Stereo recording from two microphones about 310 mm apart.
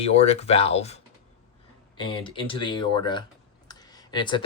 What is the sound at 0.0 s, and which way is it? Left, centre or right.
Speech, centre.